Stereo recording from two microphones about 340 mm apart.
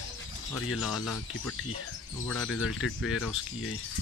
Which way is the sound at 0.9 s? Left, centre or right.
Left.